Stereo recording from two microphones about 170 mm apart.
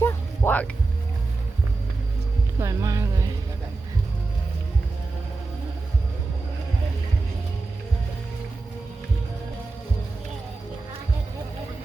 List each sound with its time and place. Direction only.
0.0 s music: 15° left (ahead or behind)
2.6 s music: 20° right (ahead or behind)